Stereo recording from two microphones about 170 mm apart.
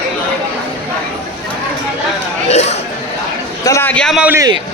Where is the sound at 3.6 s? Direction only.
15° left (ahead or behind).